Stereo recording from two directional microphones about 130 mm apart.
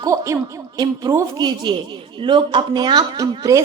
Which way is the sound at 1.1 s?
35° right (ahead or behind).